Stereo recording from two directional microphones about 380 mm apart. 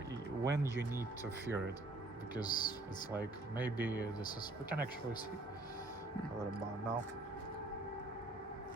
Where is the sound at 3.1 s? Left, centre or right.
Centre.